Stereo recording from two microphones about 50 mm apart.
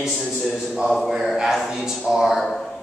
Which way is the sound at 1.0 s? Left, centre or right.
Centre.